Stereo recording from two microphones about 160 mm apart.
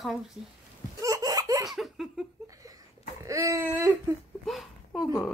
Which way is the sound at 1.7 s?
Centre (ahead or behind).